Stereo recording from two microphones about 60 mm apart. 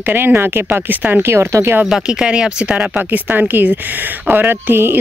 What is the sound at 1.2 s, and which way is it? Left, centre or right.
Speech, right.